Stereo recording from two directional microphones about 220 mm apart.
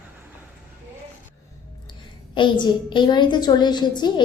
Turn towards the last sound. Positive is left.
turn(degrees=20)  # may be behind; listen again after turning